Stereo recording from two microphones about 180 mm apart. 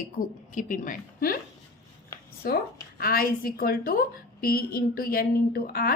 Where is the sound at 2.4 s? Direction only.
55° left (ahead or behind).